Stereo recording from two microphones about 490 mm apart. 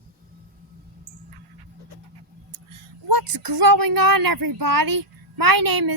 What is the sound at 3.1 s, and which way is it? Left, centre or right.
A woman's voice, right.